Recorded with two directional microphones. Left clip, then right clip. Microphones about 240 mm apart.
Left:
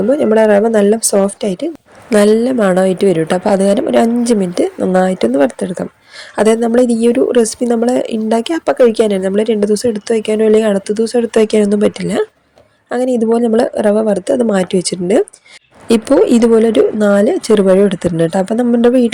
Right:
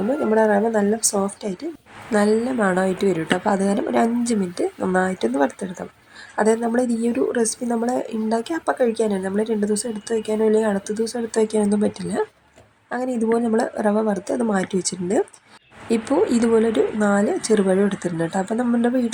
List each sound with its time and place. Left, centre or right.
0.1 s speech: left